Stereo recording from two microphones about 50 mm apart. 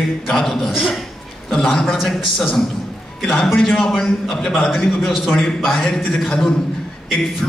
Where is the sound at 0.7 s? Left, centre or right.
Centre.